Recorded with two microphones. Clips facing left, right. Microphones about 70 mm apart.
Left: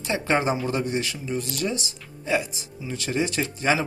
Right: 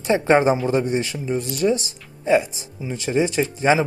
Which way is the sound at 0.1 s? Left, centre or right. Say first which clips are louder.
Right 7 dB; right.